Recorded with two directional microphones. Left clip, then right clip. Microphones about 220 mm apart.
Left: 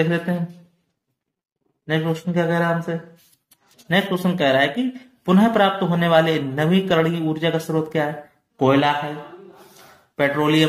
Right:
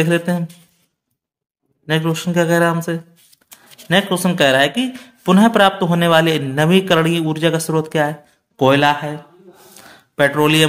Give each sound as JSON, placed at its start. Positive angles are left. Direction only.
{"t": 0.0, "sound": "a man's voice", "side_deg": -35}
{"t": 1.9, "sound": "a man's voice", "side_deg": -35}
{"t": 10.1, "sound": "a man's voice", "side_deg": -40}